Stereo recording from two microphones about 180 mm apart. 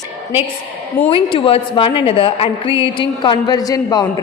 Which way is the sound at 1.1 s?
30° left (ahead or behind).